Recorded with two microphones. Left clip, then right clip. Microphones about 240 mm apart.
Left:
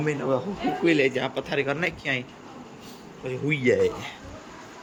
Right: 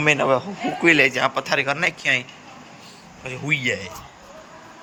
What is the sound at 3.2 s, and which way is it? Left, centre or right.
Speech, centre.